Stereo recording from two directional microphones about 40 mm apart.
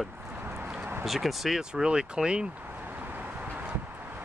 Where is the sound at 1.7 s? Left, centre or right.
Right.